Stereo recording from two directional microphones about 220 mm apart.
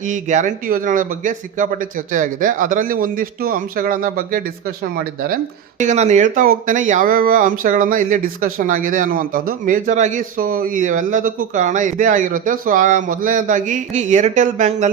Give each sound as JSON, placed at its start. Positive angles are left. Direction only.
{"t": 0.1, "sound": "speech", "side_deg": -35}
{"t": 5.8, "sound": "speech", "side_deg": -30}